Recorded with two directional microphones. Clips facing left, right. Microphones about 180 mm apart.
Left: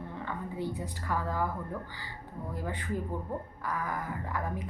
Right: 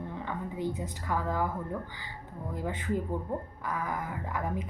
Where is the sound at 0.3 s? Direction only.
15° right (ahead or behind).